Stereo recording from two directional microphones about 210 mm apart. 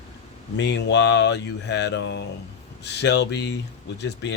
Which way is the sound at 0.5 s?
55° left (ahead or behind).